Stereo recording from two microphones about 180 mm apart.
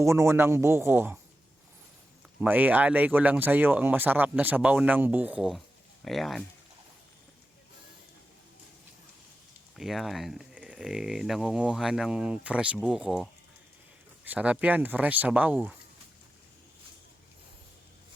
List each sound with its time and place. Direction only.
0.0 s speech: 15° right (ahead or behind)
2.4 s speech: 10° right (ahead or behind)
9.7 s speech: centre (ahead or behind)
14.3 s speech: 5° right (ahead or behind)